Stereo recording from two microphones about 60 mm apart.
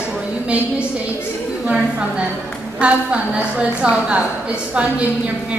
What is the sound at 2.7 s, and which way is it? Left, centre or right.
A woman's voice, centre.